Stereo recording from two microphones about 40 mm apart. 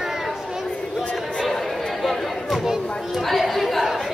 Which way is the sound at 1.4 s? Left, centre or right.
Centre.